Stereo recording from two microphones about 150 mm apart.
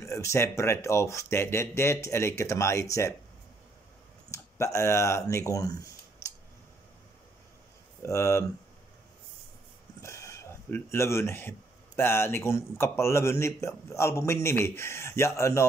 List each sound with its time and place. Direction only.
0.0 s speech: 20° left (ahead or behind)
4.3 s speech: 20° left (ahead or behind)
8.0 s speech: 20° left (ahead or behind)
10.0 s a sound: 20° left (ahead or behind)
12.0 s a man's voice: 15° left (ahead or behind)